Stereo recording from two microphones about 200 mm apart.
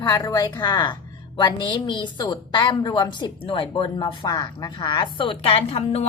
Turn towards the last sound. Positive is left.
turn(degrees=30)  # may be behind; listen again after turning